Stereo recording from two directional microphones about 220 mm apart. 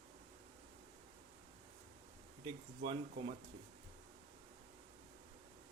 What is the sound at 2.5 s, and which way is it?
Speech, 25° right (ahead or behind).